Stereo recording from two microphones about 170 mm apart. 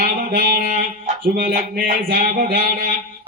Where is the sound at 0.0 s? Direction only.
55° right (ahead or behind).